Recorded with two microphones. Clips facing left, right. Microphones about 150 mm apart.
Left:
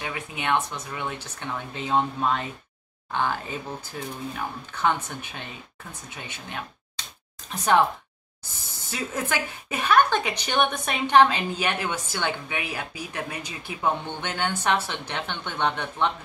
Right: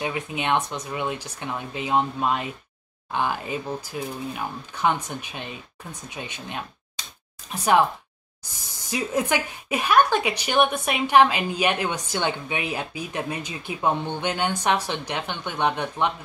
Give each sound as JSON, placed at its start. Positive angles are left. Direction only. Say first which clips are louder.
{"t": 0.0, "sound": "a woman's voice", "louder": "right 4 dB", "side_deg": -20}
{"t": 8.9, "sound": "a woman's voice", "louder": "right 5 dB", "side_deg": -15}